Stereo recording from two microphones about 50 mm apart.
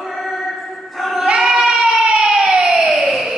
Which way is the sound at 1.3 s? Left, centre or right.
Centre.